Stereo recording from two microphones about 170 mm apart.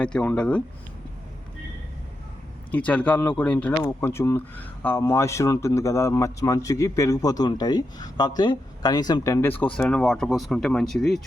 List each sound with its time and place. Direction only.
0.0 s speech: 5° left (ahead or behind)
2.7 s speech: 10° left (ahead or behind)